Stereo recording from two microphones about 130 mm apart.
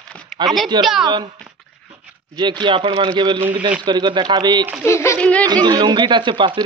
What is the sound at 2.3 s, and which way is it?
Speech, 35° right (ahead or behind).